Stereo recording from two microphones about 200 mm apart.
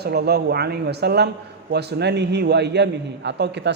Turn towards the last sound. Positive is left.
turn(degrees=-60)  # may be behind; listen again after turning